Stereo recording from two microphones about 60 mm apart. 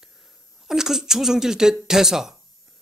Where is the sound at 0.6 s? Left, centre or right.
Centre.